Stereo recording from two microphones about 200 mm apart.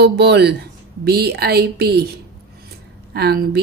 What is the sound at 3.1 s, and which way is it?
Speech, 55° right (ahead or behind).